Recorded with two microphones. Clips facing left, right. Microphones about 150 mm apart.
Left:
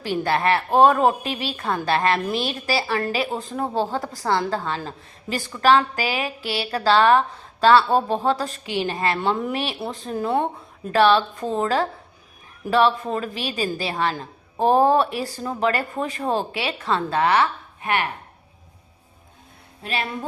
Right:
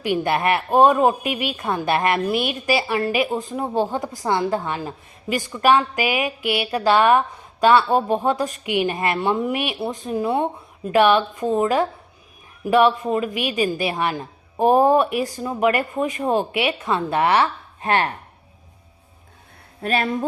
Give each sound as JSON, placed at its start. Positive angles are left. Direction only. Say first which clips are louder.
{"t": 0.0, "sound": "a woman's voice", "louder": "right 1 dB", "side_deg": -15}
{"t": 17.7, "sound": "speech", "louder": "right 4 dB", "side_deg": -35}
{"t": 19.8, "sound": "speech", "louder": "right 6 dB", "side_deg": -50}